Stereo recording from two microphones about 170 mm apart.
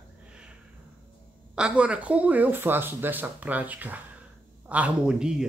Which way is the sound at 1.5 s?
5° right (ahead or behind).